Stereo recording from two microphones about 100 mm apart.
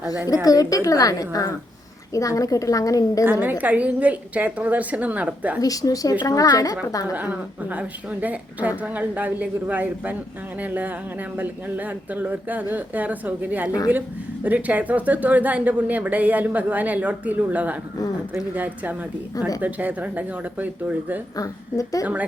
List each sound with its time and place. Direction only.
0.4 s a woman's voice: 35° left (ahead or behind)
3.6 s speech: 15° right (ahead or behind)
5.5 s a woman's voice: 35° left (ahead or behind)
7.1 s speech: 15° right (ahead or behind)
21.3 s a woman's voice: 35° left (ahead or behind)
22.0 s speech: 15° right (ahead or behind)